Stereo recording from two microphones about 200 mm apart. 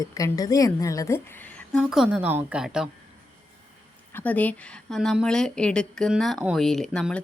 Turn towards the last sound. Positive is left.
turn(degrees=5)  # may be behind; listen again after turning